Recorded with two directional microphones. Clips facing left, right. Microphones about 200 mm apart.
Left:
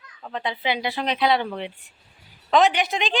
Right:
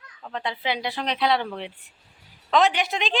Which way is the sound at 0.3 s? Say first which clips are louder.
Left 2 dB; 5° left (ahead or behind).